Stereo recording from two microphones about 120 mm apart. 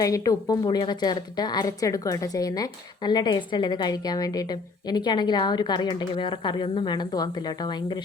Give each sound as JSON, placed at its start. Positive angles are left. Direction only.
{"t": 0.0, "sound": "a woman's voice", "side_deg": 30}